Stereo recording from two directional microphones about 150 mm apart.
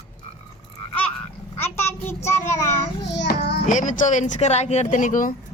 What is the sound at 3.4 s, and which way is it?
Speech, 90° left.